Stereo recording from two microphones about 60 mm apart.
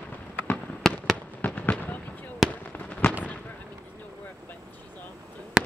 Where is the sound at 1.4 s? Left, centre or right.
Left.